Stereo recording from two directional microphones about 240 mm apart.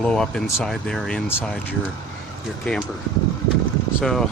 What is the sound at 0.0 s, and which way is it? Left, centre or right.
Speech, centre.